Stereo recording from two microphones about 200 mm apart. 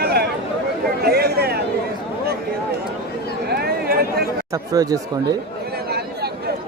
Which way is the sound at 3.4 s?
50° right (ahead or behind).